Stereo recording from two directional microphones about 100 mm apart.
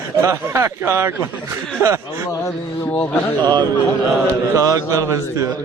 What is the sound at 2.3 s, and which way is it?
Speech, 30° left (ahead or behind).